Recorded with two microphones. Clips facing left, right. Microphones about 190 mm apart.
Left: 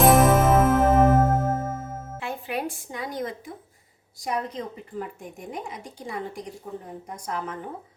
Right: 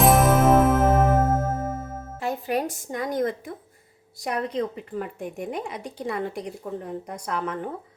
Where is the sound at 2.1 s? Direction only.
40° right (ahead or behind).